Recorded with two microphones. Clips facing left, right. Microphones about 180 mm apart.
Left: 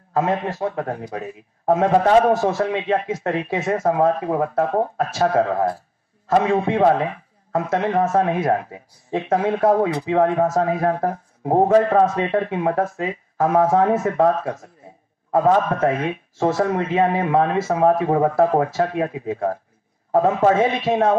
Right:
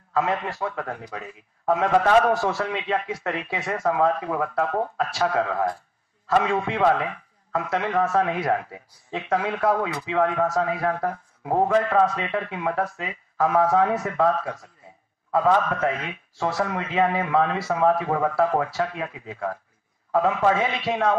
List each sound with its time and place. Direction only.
0.1 s a man's voice: 40° left (ahead or behind)